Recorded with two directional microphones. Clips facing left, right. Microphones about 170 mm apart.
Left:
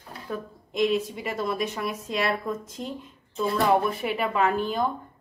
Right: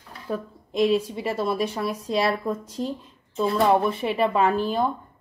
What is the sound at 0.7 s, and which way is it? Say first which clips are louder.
A woman's voice: right 3 dB; 30° right (ahead or behind).